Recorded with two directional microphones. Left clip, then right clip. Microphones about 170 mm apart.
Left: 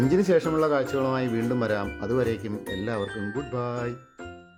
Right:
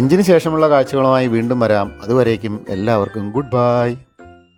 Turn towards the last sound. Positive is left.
turn(degrees=-50)  # may be behind; listen again after turning